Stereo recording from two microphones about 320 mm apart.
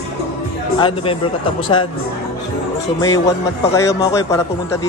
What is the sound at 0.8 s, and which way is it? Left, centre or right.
Speech, centre.